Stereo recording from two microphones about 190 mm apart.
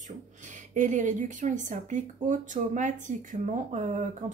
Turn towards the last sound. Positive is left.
turn(degrees=-40)  # may be behind; listen again after turning